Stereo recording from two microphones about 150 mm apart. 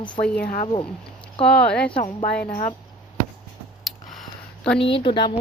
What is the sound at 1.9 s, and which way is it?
Speech, 50° left (ahead or behind).